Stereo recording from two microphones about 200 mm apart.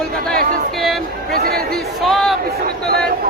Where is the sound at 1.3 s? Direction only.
50° right (ahead or behind).